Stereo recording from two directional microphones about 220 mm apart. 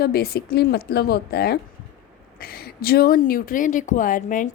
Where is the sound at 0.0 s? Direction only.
45° left (ahead or behind).